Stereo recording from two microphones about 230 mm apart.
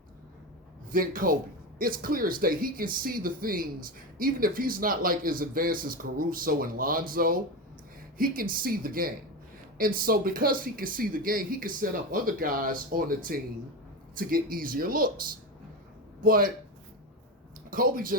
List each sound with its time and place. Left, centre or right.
0.9 s speech: right
16.2 s speech: right
17.7 s speech: right